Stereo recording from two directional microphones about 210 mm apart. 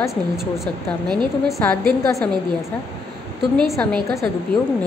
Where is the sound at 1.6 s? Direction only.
5° left (ahead or behind).